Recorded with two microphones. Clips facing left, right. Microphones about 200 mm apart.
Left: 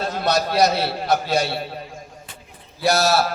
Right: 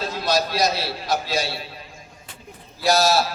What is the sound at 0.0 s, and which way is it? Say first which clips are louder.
A man's voice: left 1 dB; 60° left (ahead or behind).